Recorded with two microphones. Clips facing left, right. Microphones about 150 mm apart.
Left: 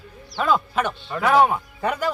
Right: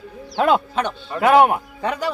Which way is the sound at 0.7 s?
5° left (ahead or behind).